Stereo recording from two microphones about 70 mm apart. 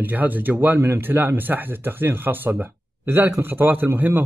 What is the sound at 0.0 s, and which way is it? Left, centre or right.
A man's voice, right.